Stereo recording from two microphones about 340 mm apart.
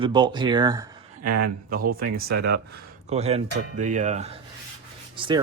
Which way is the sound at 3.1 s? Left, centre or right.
Centre.